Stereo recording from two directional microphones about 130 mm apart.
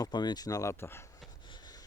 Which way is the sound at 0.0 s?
35° left (ahead or behind).